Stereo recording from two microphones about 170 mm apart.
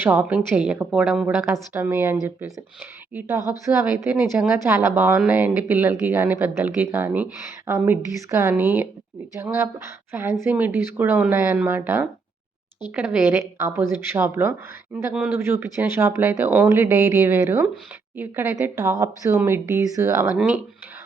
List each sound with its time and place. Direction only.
0.0 s a woman's voice: 15° right (ahead or behind)
3.2 s a woman's voice: 15° right (ahead or behind)